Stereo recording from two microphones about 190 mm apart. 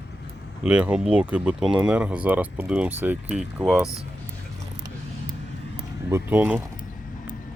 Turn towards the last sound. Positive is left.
turn(degrees=-10)  # may be behind; listen again after turning